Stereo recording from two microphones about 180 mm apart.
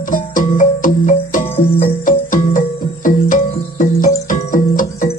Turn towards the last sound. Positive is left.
turn(degrees=45)  # may be behind; listen again after turning